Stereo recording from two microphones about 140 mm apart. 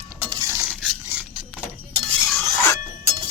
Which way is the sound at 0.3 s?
25° right (ahead or behind).